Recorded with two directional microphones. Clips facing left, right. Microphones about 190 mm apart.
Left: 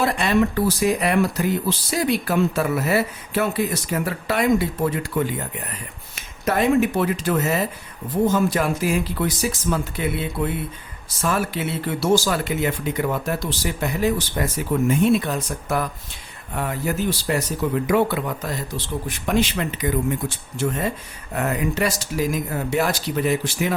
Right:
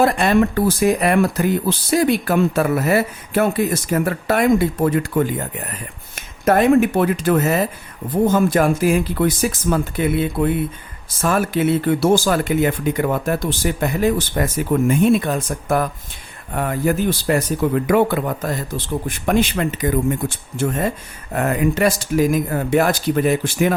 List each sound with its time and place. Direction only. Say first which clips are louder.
0.0 s speech: right 4 dB; 50° right (ahead or behind)